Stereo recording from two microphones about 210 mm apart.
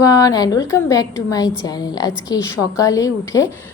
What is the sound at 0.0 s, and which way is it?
A woman's voice, 15° left (ahead or behind).